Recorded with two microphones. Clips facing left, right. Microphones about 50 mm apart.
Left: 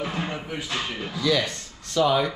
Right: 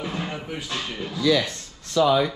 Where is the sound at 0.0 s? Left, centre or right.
Centre.